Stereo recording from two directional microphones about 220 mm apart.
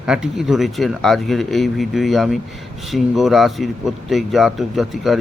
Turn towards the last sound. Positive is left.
turn(degrees=0)  # may be behind; listen again after turning